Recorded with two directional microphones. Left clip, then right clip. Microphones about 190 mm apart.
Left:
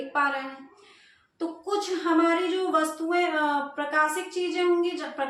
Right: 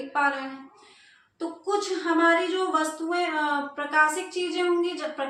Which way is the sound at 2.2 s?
25° left (ahead or behind).